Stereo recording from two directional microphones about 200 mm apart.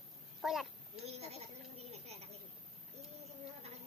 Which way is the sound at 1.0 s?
30° right (ahead or behind).